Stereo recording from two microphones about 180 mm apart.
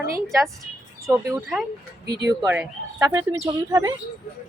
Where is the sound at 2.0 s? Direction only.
65° right (ahead or behind).